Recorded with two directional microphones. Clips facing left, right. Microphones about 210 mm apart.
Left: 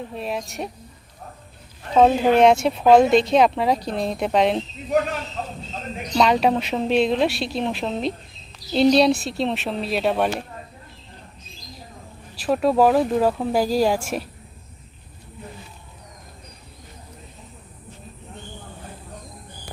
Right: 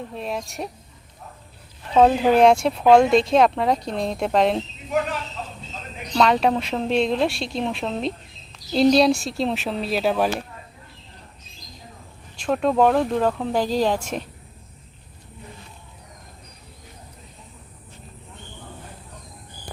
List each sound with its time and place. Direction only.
0.0 s speech: centre (ahead or behind)
1.9 s speech: centre (ahead or behind)
5.4 s a sound: 45° left (ahead or behind)
6.1 s speech: 5° left (ahead or behind)
12.4 s speech: 5° left (ahead or behind)